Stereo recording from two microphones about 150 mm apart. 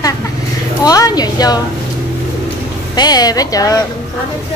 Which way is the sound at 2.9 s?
25° left (ahead or behind).